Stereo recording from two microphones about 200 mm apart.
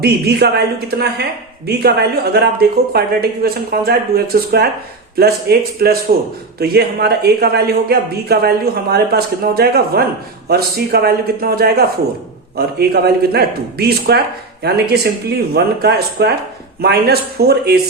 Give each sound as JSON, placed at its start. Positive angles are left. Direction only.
{"t": 0.0, "sound": "a woman's voice", "side_deg": -55}